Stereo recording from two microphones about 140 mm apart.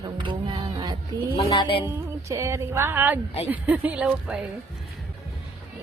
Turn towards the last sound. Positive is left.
turn(degrees=-10)  # may be behind; listen again after turning